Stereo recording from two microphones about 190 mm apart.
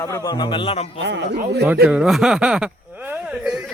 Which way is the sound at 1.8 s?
Centre (ahead or behind).